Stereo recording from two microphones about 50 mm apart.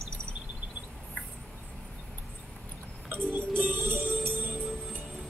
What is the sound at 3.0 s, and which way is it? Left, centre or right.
Music, right.